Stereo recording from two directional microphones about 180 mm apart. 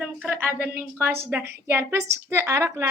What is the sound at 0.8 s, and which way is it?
A woman's voice, 10° right (ahead or behind).